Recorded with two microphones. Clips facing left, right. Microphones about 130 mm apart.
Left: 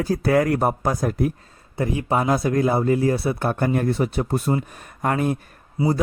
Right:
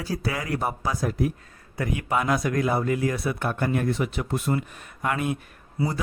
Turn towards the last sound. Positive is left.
turn(degrees=20)  # may be behind; listen again after turning